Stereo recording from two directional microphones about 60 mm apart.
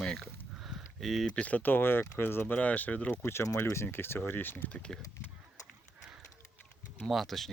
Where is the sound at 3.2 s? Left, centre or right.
Left.